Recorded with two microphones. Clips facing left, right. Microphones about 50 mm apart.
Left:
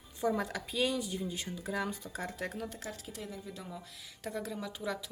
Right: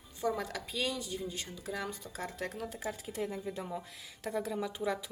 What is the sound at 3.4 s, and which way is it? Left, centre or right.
Speech, right.